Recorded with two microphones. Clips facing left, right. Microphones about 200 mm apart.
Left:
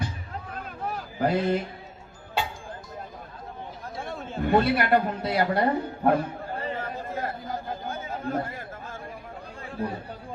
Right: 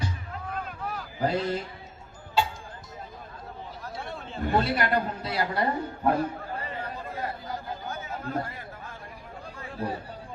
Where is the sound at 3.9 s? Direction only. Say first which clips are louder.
Left 4 dB; 45° left (ahead or behind).